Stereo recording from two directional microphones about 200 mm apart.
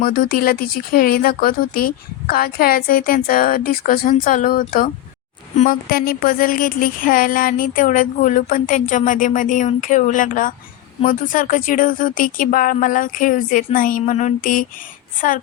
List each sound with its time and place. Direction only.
0.0 s speech: 45° left (ahead or behind)